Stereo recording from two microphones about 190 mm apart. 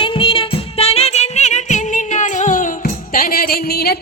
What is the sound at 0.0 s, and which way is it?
Music, 30° left (ahead or behind).